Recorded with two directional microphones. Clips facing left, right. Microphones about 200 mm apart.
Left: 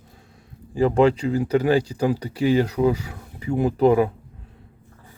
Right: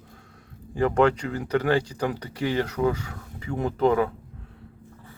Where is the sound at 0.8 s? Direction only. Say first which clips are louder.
Left 3 dB; 30° left (ahead or behind).